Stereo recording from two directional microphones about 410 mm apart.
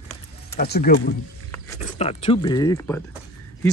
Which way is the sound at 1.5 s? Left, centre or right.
Centre.